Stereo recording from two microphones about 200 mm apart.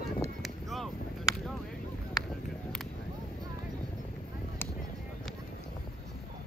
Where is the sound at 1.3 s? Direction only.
15° left (ahead or behind).